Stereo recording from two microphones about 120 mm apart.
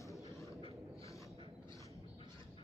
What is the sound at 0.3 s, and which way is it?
Vehicle, 25° left (ahead or behind).